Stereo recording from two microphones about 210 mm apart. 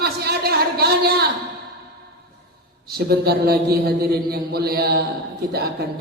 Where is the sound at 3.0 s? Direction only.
50° right (ahead or behind).